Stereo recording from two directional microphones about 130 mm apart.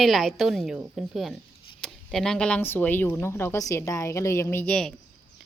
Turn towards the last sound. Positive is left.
turn(degrees=5)  # may be behind; listen again after turning